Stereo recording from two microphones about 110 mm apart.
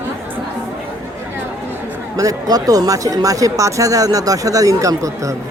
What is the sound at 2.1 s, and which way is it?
Speech, 35° right (ahead or behind).